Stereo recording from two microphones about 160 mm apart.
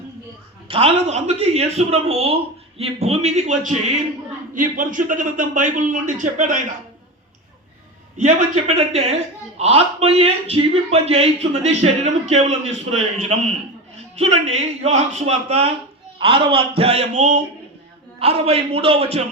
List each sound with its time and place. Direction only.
0.7 s a man's voice: 40° right (ahead or behind)
8.2 s a man's voice: 45° right (ahead or behind)